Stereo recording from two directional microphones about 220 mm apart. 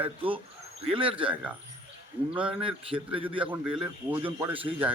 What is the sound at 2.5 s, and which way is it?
Speech, 25° right (ahead or behind).